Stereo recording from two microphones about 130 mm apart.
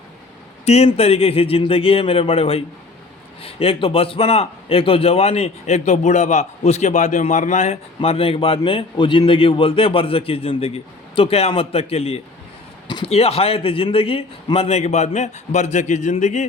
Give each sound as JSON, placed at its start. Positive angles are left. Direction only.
{"t": 0.6, "sound": "a man's voice", "side_deg": 55}